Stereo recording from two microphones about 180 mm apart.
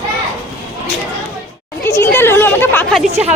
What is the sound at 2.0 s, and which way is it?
Speech, 10° left (ahead or behind).